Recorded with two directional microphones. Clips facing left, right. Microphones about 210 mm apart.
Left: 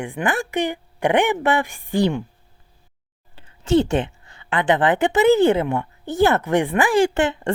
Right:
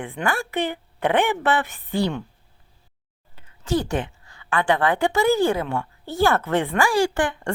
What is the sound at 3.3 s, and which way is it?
A woman's voice, 30° left (ahead or behind).